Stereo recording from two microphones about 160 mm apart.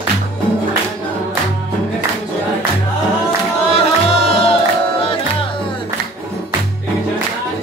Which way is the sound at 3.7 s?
40° left (ahead or behind).